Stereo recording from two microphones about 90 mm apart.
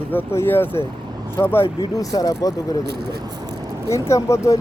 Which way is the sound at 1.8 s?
45° left (ahead or behind).